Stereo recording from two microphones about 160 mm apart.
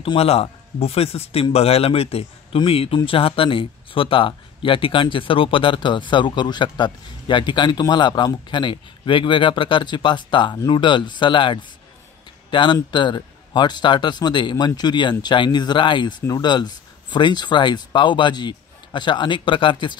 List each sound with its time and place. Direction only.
0.0 s speech: 35° left (ahead or behind)